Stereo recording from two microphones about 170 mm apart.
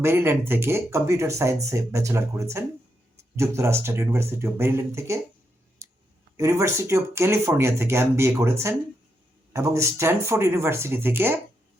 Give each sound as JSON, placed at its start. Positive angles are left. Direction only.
{"t": 0.0, "sound": "speech", "side_deg": -15}
{"t": 5.8, "sound": "a sound", "side_deg": -15}
{"t": 6.3, "sound": "speech", "side_deg": -15}